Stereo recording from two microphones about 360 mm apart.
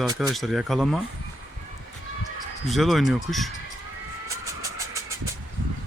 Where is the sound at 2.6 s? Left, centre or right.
Centre.